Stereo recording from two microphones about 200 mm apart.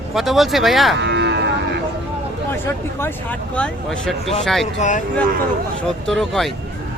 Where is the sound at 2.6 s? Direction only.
10° left (ahead or behind).